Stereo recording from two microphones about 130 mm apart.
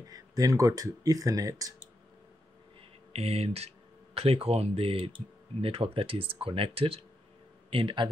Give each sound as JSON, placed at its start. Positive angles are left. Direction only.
{"t": 0.0, "sound": "speech", "side_deg": -25}
{"t": 3.1, "sound": "a man's voice", "side_deg": -55}